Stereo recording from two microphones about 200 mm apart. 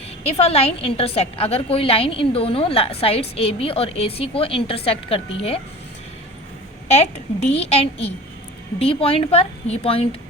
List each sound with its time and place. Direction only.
0.3 s a woman's voice: 30° left (ahead or behind)
6.8 s a woman's voice: 30° left (ahead or behind)